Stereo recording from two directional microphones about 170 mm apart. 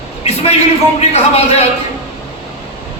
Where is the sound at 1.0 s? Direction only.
35° left (ahead or behind).